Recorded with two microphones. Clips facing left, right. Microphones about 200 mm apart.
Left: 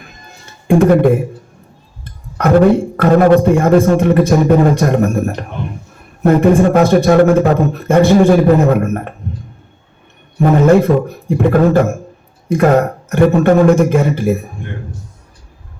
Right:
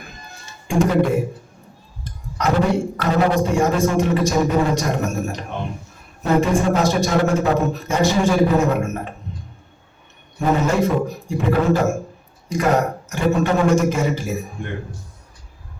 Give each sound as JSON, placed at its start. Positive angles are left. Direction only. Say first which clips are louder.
{"t": 0.7, "sound": "a man's voice", "louder": "left 8 dB", "side_deg": 55}
{"t": 2.0, "sound": "a sound", "louder": "left 7 dB", "side_deg": 55}
{"t": 3.0, "sound": "a man's voice", "louder": "left 11 dB", "side_deg": 55}
{"t": 10.3, "sound": "a man's voice", "louder": "left 9 dB", "side_deg": 55}